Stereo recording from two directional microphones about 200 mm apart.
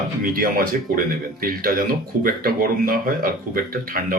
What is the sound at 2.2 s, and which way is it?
Speech, 45° right (ahead or behind).